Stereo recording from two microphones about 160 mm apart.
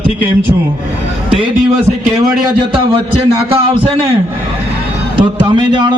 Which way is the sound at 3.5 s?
35° right (ahead or behind).